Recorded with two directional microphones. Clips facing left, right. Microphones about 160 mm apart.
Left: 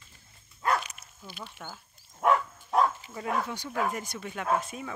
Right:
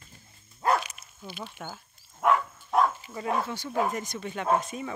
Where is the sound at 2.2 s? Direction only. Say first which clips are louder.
Even; centre (ahead or behind).